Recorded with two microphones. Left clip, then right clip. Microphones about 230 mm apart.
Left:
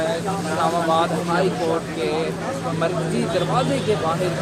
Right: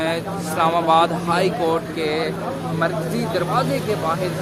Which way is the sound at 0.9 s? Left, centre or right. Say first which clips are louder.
Right 3 dB; right.